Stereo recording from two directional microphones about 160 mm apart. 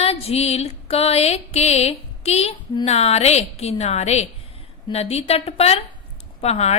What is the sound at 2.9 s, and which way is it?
A woman's voice, 40° left (ahead or behind).